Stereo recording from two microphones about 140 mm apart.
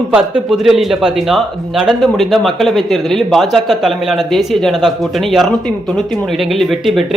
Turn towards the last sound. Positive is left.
turn(degrees=0)  # may be behind; listen again after turning